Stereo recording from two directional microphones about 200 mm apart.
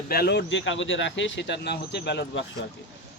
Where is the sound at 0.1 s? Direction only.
55° left (ahead or behind).